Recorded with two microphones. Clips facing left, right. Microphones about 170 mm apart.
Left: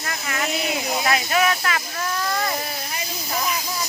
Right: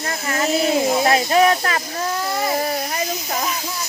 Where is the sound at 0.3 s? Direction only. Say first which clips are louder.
Right 7 dB; 35° right (ahead or behind).